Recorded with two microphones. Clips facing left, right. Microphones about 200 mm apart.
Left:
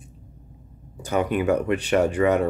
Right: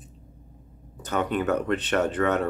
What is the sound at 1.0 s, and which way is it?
Speech, 10° left (ahead or behind).